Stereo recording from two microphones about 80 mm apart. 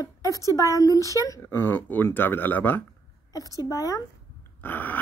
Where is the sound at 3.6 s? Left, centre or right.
Left.